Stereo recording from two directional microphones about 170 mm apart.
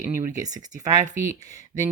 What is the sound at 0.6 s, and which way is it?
Speech, 45° right (ahead or behind).